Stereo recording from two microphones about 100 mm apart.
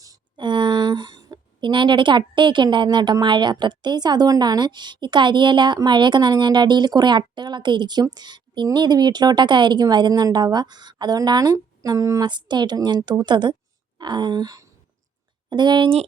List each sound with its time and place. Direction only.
0.3 s a woman's voice: 50° right (ahead or behind); by 12.2 s 35° right (ahead or behind)
12.2 s a woman's voice: 45° right (ahead or behind)